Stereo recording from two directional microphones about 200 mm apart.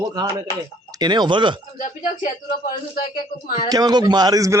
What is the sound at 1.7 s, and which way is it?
Speech, 40° left (ahead or behind).